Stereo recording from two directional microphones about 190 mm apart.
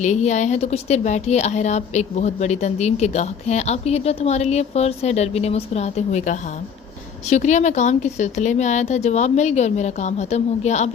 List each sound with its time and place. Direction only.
0.0 s a woman's voice: 40° left (ahead or behind)